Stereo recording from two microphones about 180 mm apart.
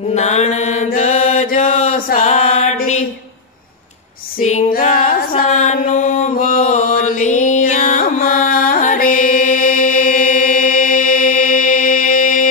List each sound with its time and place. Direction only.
0.1 s mantra: 40° left (ahead or behind)
4.4 s mantra: 45° left (ahead or behind)